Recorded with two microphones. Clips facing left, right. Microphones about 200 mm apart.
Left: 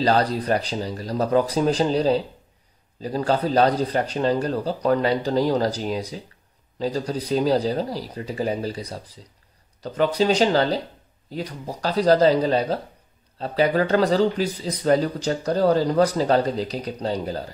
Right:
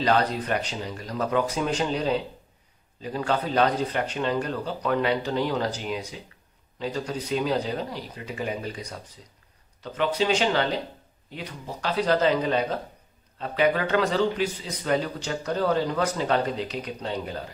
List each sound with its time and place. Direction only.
0.0 s speech: 35° left (ahead or behind)